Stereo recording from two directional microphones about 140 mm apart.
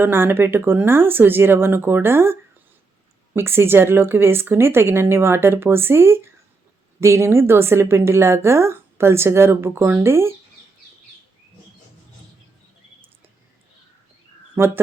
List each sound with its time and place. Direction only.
0.0 s a woman's voice: 15° right (ahead or behind)
14.6 s a man's voice: 10° right (ahead or behind)